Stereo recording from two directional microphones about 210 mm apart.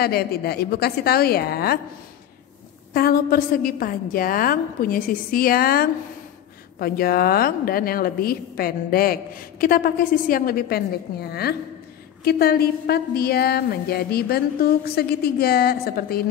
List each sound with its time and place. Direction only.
0.0 s a woman's voice: 50° left (ahead or behind)
2.9 s a woman's voice: 45° left (ahead or behind)